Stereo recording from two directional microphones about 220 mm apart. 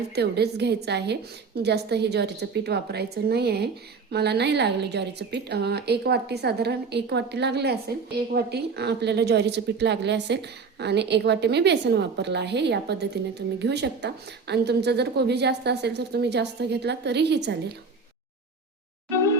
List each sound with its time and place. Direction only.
0.1 s a woman's voice: 50° right (ahead or behind)